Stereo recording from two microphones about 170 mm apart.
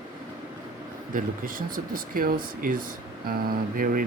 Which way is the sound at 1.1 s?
55° right (ahead or behind).